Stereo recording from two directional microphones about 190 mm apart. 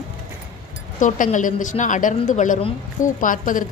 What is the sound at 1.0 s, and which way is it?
A woman's voice, 45° left (ahead or behind).